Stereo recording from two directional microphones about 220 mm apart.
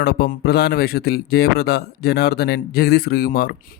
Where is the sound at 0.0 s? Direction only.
45° left (ahead or behind).